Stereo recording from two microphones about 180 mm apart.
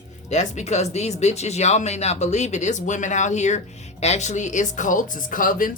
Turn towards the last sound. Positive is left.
turn(degrees=50)  # may be behind; listen again after turning